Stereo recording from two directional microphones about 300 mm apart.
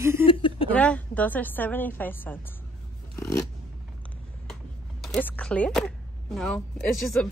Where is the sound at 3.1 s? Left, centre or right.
Centre.